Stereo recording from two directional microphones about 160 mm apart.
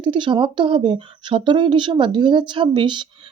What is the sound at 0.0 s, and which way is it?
Speech, 30° right (ahead or behind).